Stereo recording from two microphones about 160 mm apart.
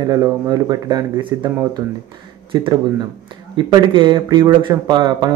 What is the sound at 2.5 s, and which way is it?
Speech, 30° right (ahead or behind).